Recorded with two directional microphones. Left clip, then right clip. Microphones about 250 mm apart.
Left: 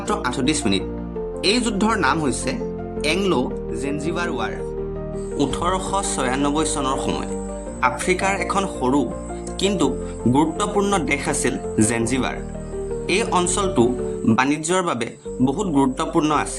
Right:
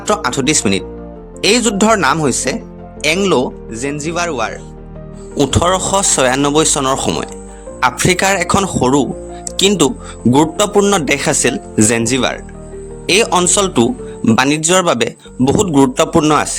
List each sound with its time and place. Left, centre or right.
0.1 s speech: right